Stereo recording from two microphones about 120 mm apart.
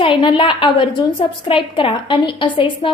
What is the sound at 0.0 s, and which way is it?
A woman's voice, 40° left (ahead or behind).